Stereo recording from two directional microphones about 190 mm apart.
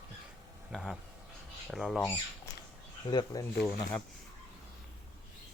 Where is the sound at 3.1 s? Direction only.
25° left (ahead or behind).